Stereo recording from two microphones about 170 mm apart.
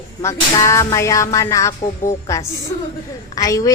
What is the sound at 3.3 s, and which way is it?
Speech, 20° left (ahead or behind).